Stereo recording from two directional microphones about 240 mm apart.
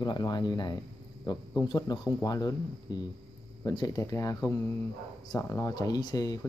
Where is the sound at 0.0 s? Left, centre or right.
Centre.